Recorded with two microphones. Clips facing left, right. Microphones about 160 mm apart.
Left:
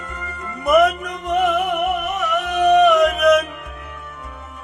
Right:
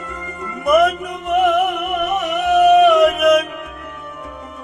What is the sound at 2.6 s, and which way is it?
Music, 5° right (ahead or behind).